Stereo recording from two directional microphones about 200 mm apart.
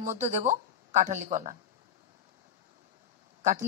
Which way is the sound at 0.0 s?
35° right (ahead or behind).